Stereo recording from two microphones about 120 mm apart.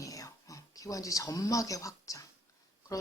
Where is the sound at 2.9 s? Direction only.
30° left (ahead or behind).